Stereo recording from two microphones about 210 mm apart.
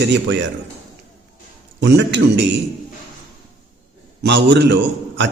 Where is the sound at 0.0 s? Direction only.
55° right (ahead or behind).